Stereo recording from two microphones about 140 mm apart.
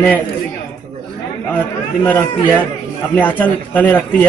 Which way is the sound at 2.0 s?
10° left (ahead or behind).